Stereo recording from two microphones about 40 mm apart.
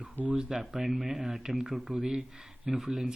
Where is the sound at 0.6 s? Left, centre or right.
Centre.